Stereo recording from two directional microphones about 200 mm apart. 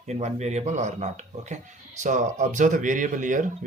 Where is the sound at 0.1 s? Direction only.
35° right (ahead or behind).